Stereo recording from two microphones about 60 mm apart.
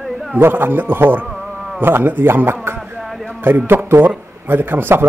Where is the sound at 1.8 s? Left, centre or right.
Right.